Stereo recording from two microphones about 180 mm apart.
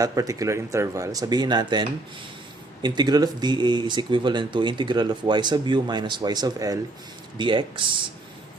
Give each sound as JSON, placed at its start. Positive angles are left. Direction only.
{"t": 0.0, "sound": "speech", "side_deg": -20}